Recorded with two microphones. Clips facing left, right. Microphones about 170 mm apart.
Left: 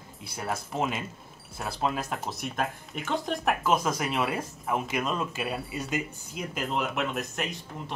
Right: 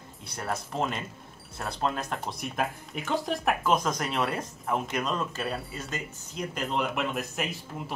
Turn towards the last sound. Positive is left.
turn(degrees=-5)  # may be behind; listen again after turning